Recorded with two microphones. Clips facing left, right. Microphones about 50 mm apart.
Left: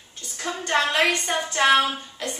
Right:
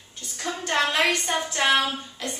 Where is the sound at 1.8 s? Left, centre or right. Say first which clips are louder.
Left 3 dB; centre.